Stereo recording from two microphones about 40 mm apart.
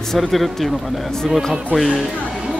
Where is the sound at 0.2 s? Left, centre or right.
Centre.